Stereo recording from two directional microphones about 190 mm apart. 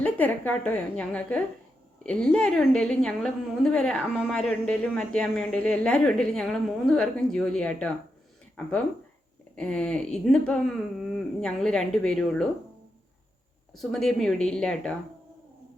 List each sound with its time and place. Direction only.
0.0 s a woman's voice: 10° left (ahead or behind)
9.6 s a woman's voice: 5° left (ahead or behind)
13.7 s a woman's voice: centre (ahead or behind)